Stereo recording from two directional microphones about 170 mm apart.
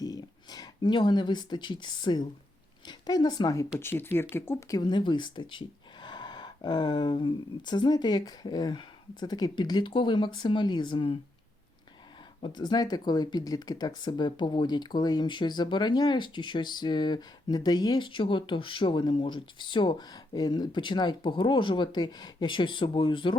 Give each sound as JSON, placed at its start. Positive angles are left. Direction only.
{"t": 0.0, "sound": "speech", "side_deg": 20}
{"t": 4.8, "sound": "speech", "side_deg": 25}
{"t": 12.4, "sound": "speech", "side_deg": 25}